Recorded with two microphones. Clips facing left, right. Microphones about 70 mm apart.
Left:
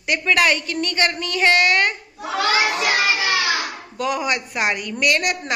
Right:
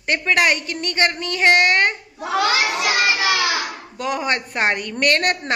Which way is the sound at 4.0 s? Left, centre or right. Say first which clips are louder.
Even; right.